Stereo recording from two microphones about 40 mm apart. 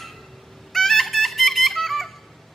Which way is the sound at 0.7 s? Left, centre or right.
Centre.